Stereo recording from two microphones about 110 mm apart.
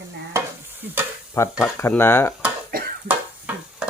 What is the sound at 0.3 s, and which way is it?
Stir, 20° right (ahead or behind).